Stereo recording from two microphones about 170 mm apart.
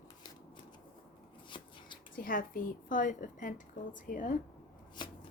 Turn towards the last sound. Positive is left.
turn(degrees=25)  # may be behind; listen again after turning